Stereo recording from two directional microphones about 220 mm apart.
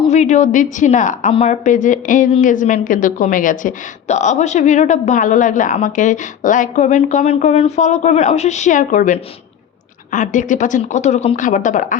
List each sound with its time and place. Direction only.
0.1 s a woman's voice: 35° left (ahead or behind)